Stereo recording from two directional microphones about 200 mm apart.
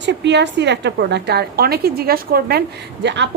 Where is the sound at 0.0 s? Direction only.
60° right (ahead or behind).